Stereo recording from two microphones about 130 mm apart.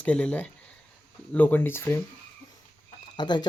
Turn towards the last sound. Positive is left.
turn(degrees=35)  # may be behind; listen again after turning